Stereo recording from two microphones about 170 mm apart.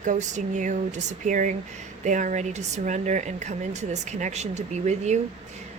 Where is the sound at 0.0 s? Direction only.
45° right (ahead or behind).